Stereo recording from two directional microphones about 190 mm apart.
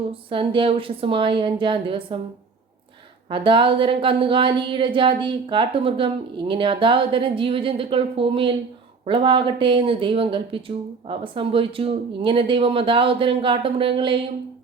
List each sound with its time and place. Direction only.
0.1 s a woman's voice: 25° right (ahead or behind)
3.2 s a woman's voice: 25° right (ahead or behind)